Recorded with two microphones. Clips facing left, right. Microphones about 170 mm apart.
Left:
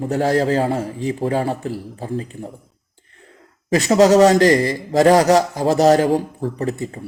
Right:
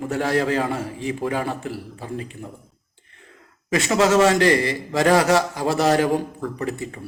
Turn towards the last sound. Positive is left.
turn(degrees=35)  # may be behind; listen again after turning